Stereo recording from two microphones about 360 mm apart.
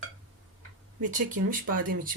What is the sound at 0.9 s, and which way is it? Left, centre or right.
Speech, right.